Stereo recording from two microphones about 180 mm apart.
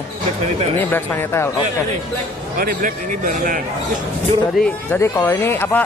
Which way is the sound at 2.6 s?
50° right (ahead or behind).